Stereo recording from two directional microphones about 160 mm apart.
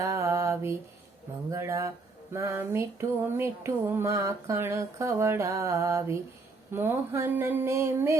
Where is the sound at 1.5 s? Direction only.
20° right (ahead or behind).